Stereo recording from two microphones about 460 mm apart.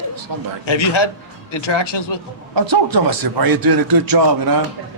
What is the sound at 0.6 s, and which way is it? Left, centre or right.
Speech, left.